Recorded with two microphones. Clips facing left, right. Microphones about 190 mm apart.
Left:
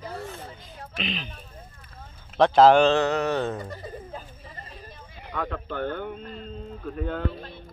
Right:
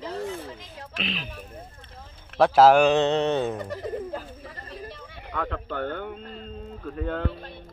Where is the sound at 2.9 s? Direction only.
25° right (ahead or behind).